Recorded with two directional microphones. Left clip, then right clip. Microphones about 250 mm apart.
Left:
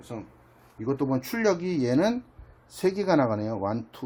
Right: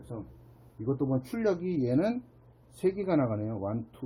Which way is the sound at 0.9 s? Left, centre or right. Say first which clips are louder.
Left 4 dB; left.